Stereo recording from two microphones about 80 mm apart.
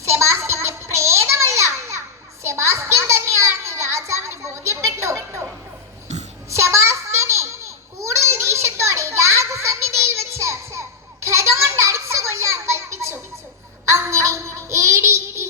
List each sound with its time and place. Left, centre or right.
0.0 s music: right
6.5 s a sound: right
13.9 s child singing: right